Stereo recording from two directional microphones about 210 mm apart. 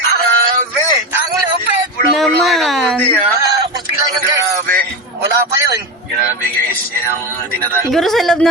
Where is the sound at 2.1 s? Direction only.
Centre (ahead or behind).